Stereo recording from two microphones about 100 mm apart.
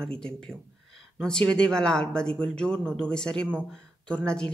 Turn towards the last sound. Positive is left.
turn(degrees=10)  # may be behind; listen again after turning